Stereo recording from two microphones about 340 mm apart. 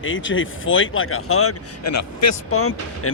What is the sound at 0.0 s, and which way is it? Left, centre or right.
Speech, left.